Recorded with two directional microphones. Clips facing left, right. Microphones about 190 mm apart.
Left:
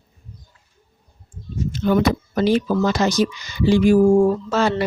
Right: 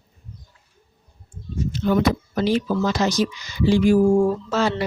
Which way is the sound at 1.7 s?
60° left (ahead or behind).